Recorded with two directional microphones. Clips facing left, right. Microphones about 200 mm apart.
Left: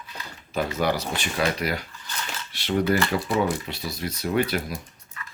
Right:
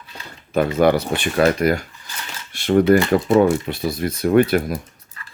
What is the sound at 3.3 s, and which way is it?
Speech, 50° right (ahead or behind).